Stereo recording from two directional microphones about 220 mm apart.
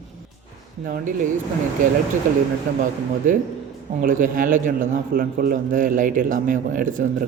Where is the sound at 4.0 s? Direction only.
35° right (ahead or behind).